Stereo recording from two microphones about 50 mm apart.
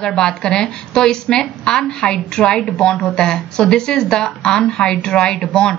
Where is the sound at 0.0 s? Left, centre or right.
Centre.